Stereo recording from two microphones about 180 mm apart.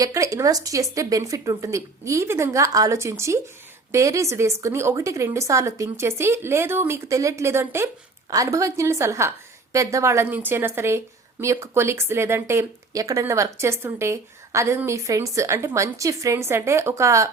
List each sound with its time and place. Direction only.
0.0 s a woman's voice: 20° right (ahead or behind)